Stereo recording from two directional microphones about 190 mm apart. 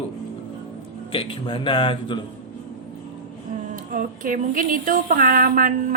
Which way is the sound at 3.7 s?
45° right (ahead or behind).